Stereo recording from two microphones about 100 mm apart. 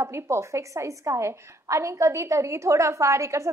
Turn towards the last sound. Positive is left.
turn(degrees=-30)  # may be behind; listen again after turning